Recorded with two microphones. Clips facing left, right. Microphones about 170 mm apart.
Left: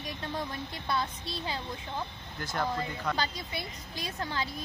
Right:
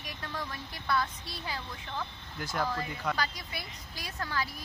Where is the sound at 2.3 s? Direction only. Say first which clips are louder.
Even; 5° right (ahead or behind).